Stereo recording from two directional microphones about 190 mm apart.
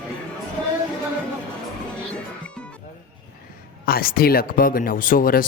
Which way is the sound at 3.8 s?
50° left (ahead or behind).